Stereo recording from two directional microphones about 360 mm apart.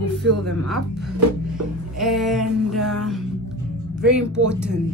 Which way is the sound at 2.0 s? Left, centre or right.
Centre.